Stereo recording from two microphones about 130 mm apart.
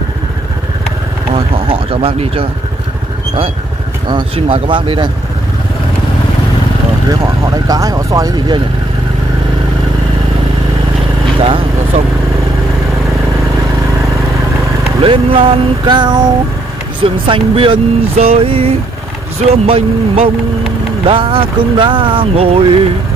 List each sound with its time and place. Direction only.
1.3 s a sound: 45° right (ahead or behind)
4.1 s speech: 45° right (ahead or behind)
7.1 s speech: 30° right (ahead or behind)
15.0 s speech: 40° right (ahead or behind)